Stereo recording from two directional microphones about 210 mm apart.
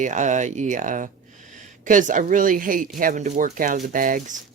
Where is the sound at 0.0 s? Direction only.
35° right (ahead or behind).